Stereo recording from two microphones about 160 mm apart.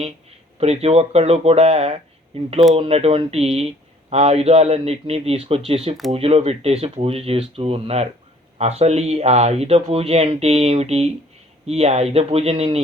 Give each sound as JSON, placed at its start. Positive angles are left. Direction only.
{"t": 0.6, "sound": "speech", "side_deg": -40}